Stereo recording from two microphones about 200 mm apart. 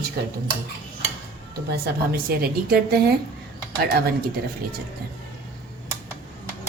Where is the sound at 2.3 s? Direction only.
50° right (ahead or behind).